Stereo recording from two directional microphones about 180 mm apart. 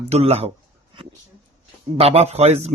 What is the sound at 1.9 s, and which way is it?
Speech, 35° right (ahead or behind).